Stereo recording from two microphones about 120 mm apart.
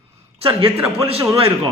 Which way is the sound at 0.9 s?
55° right (ahead or behind).